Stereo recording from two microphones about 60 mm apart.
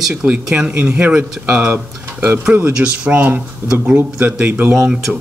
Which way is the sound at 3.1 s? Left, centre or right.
Right.